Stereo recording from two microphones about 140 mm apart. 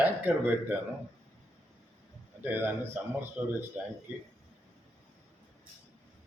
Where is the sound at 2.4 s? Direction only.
15° right (ahead or behind).